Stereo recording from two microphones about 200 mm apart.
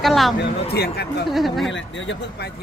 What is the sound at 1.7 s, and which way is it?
Speech, 70° left (ahead or behind).